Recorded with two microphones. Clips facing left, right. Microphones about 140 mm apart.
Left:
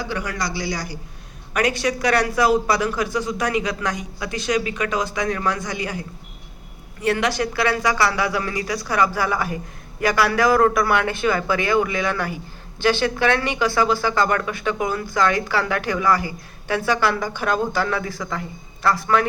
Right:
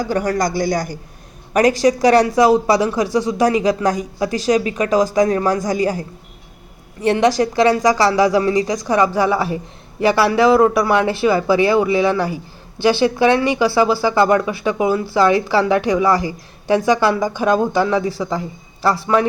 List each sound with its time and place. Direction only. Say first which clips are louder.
0.0 s speech: right 8 dB; 45° right (ahead or behind)
1.5 s speech: right 8 dB; 35° right (ahead or behind)
7.1 s speech: right 6 dB; 30° right (ahead or behind)
12.8 s speech: right 5 dB; 15° right (ahead or behind)
16.0 s speech: right 4 dB; 35° right (ahead or behind)
16.6 s speech: right 6 dB; 15° right (ahead or behind)
18.1 s speech: right 6 dB; 30° right (ahead or behind)